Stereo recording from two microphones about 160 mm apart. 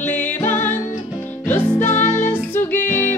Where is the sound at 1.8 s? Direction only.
45° left (ahead or behind).